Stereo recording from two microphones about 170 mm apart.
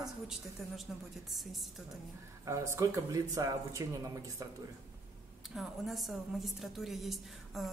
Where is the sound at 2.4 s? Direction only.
15° right (ahead or behind).